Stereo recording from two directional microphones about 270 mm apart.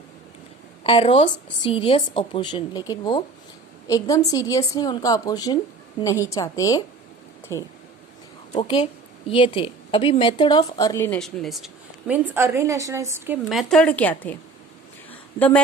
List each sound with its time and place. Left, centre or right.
0.9 s a woman's voice: left
15.4 s a woman's voice: centre